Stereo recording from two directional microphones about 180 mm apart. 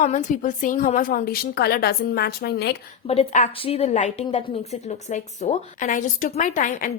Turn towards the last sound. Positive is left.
turn(degrees=45)  # may be behind; listen again after turning